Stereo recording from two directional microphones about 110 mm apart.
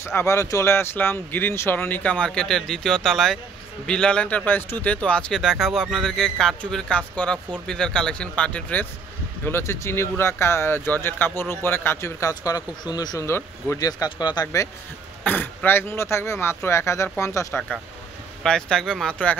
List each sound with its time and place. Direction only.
0.0 s speech: 25° left (ahead or behind)
9.4 s speech: 25° left (ahead or behind)
15.2 s speech: 15° left (ahead or behind)
18.4 s speech: 5° left (ahead or behind)